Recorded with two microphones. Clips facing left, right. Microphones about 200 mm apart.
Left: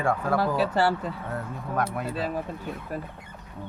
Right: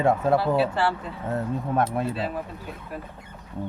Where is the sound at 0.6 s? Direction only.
40° left (ahead or behind).